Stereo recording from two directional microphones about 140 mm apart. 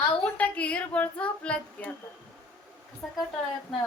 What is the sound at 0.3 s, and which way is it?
Speech, 10° left (ahead or behind).